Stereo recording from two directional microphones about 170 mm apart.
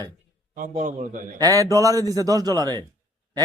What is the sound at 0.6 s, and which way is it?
Speech, 50° right (ahead or behind).